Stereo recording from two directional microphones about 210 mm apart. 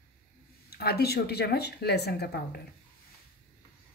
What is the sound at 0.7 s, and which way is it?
Speech, 50° left (ahead or behind).